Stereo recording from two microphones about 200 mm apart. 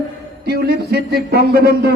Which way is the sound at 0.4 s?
55° right (ahead or behind).